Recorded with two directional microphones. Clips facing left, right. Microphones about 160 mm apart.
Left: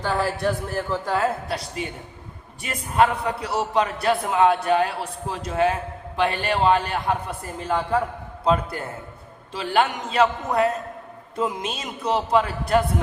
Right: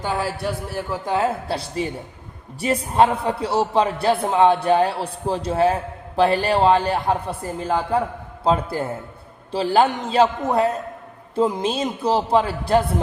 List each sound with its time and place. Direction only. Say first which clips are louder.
0.0 s a man's voice: left 1 dB; 15° right (ahead or behind); by 13.0 s 30° right (ahead or behind)